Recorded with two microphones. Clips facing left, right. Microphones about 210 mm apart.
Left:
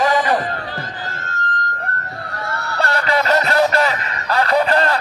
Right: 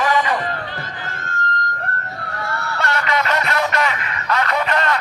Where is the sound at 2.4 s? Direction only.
Centre (ahead or behind).